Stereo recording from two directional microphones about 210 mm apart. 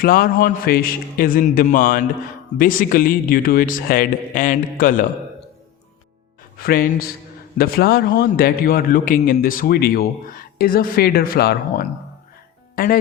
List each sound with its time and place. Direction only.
0.0 s speech: 45° left (ahead or behind)
6.6 s a man's voice: 45° left (ahead or behind)